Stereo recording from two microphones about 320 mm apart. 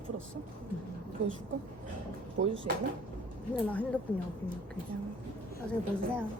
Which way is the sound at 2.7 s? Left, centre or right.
Right.